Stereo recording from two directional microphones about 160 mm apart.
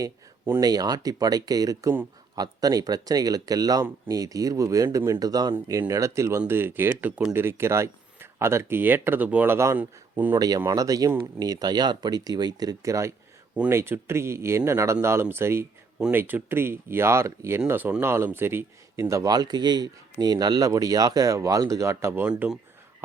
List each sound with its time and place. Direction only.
0.0 s speech: 20° right (ahead or behind)
10.3 s speech: 25° right (ahead or behind); by 22.5 s 10° right (ahead or behind)